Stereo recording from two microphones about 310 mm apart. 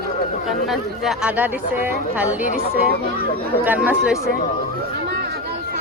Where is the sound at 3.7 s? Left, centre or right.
Centre.